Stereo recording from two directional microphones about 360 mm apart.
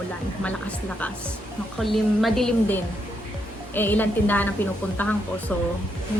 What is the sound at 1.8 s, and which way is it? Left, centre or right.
Speech, centre.